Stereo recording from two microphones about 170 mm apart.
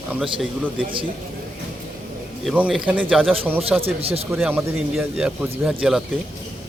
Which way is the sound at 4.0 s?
35° right (ahead or behind).